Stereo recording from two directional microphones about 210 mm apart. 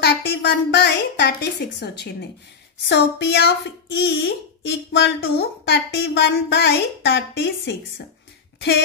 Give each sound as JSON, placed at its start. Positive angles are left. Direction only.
{"t": 0.0, "sound": "a woman's voice", "side_deg": 50}